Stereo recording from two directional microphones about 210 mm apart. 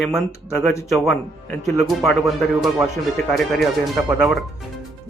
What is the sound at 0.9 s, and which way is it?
Speech, centre (ahead or behind).